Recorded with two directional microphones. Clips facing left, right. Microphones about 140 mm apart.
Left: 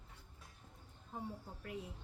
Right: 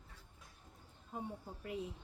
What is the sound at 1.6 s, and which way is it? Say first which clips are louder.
Speech: right 4 dB; 20° right (ahead or behind).